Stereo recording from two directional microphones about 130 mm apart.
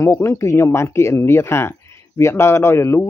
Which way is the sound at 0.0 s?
20° left (ahead or behind).